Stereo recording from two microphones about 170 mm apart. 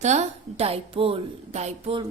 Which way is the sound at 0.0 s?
40° right (ahead or behind).